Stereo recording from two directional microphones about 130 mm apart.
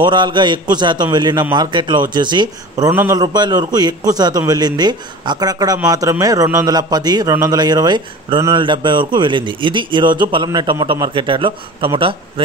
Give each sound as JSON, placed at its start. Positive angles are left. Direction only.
{"t": 0.0, "sound": "a man's voice", "side_deg": -35}